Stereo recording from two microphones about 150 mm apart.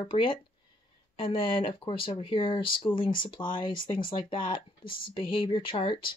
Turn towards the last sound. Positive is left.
turn(degrees=35)  # may be behind; listen again after turning